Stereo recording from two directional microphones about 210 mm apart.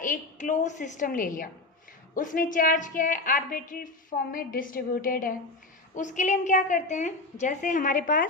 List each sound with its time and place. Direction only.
0.0 s a woman's voice: 40° left (ahead or behind)